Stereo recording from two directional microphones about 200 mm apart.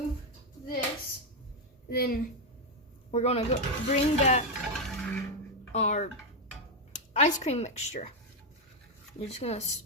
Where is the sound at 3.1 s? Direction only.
30° left (ahead or behind).